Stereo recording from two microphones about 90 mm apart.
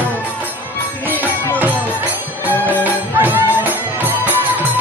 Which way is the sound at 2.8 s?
20° right (ahead or behind).